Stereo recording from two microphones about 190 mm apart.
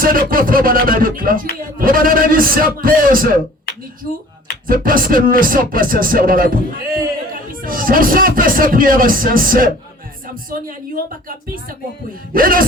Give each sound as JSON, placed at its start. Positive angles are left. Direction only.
{"t": 0.0, "sound": "speech", "side_deg": -50}
{"t": 4.6, "sound": "speech", "side_deg": -50}